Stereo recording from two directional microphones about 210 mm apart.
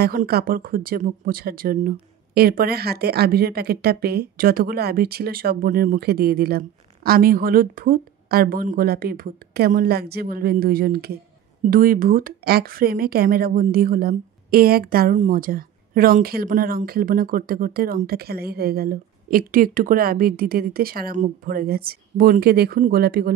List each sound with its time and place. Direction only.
0.0 s speech: 45° right (ahead or behind)